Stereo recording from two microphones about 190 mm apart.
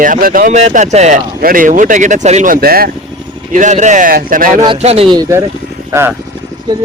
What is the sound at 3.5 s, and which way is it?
Speech, 40° right (ahead or behind).